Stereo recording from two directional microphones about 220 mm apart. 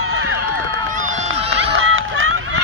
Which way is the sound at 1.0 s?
65° right (ahead or behind).